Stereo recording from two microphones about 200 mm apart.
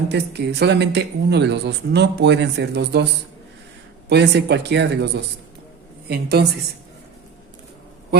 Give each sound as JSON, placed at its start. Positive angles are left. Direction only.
{"t": 0.1, "sound": "speech", "side_deg": -55}
{"t": 4.1, "sound": "speech", "side_deg": -55}